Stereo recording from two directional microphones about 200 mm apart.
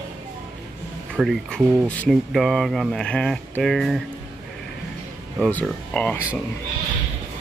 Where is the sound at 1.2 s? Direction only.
Centre (ahead or behind).